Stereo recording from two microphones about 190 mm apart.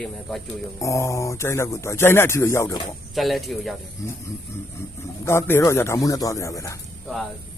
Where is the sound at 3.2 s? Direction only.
Centre (ahead or behind).